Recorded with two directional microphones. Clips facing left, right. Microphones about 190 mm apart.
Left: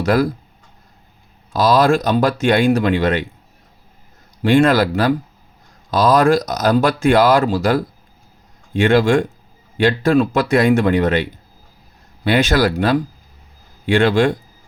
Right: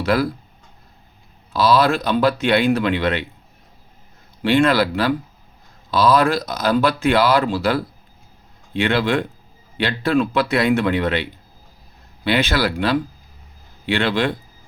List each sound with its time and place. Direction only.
0.0 s speech: 45° left (ahead or behind)
1.5 s speech: 45° left (ahead or behind)
4.4 s speech: 45° left (ahead or behind)
5.9 s speech: 45° left (ahead or behind)